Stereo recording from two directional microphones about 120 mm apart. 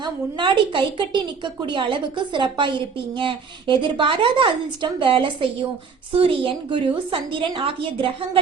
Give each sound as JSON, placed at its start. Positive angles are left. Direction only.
{"t": 0.0, "sound": "a woman's voice", "side_deg": -40}